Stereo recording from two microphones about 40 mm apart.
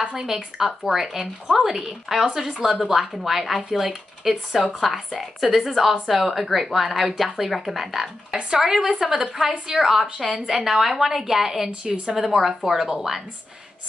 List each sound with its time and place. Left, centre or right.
0.0 s a woman's voice: centre
8.5 s a woman's voice: centre
11.8 s a woman's voice: right
12.2 s a woman's voice: centre